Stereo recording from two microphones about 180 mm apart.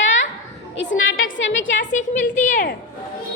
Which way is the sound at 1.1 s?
90° left.